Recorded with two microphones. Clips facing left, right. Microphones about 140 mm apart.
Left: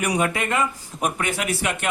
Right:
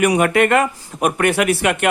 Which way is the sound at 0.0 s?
65° right (ahead or behind).